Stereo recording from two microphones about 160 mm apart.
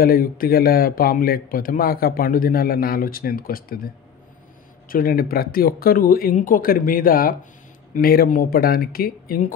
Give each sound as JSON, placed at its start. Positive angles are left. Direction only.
{"t": 0.0, "sound": "a man's voice", "side_deg": 65}